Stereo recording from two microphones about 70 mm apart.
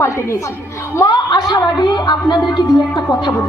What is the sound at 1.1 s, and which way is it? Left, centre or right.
A woman's voice, left.